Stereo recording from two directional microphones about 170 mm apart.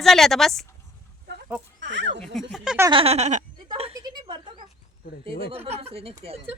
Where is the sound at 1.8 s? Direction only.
90° right.